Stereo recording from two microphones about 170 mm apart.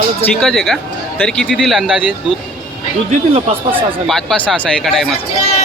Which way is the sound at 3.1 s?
35° right (ahead or behind).